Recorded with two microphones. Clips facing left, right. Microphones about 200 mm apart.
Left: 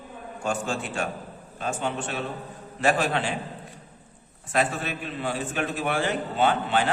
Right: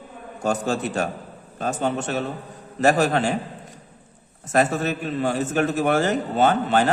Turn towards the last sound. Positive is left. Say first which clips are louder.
# right 4 dB
turn(degrees=-40)  # may be behind; listen again after turning